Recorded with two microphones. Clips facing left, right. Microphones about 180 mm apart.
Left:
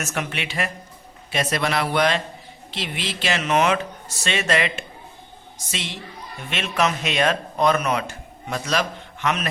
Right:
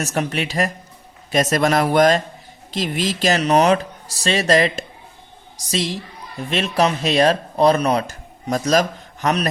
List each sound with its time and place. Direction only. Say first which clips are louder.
0.0 s a man's voice: right 6 dB; 35° right (ahead or behind)